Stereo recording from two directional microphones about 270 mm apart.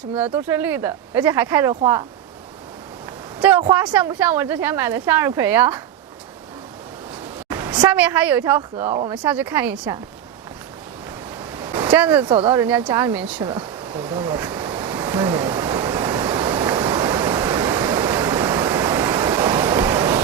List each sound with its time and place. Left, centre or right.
0.3 s speech: centre
3.6 s speech: centre
7.5 s speech: centre
11.5 s a sound: centre
12.2 s speech: centre
12.5 s speech: centre
13.5 s ocean: centre